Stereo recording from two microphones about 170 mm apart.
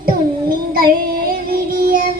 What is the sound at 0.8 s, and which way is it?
Child singing, 60° right (ahead or behind).